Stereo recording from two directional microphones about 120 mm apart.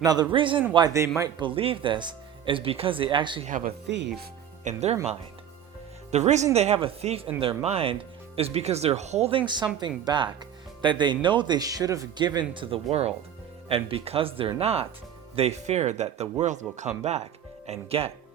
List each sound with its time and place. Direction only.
0.0 s a man's voice: 35° right (ahead or behind)
0.9 s speech: 25° right (ahead or behind)
1.4 s speech: 45° right (ahead or behind)
4.6 s speech: 65° right (ahead or behind)
6.1 s speech: 70° right (ahead or behind)
9.8 s a man's voice: 40° right (ahead or behind); by 14.8 s 55° right (ahead or behind)
15.4 s speech: 65° right (ahead or behind); by 16.9 s 85° right
17.0 s speech: 65° right (ahead or behind)
17.7 s speech: 55° right (ahead or behind)